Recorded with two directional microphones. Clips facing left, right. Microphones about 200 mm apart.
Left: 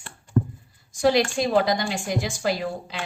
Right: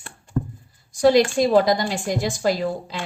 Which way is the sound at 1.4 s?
40° right (ahead or behind).